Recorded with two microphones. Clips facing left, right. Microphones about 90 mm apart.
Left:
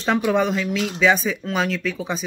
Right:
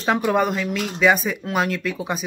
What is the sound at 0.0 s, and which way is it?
Speech, 5° right (ahead or behind).